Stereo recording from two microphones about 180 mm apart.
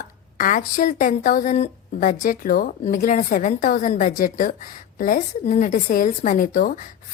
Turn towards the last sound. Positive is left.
turn(degrees=50)  # may be behind; listen again after turning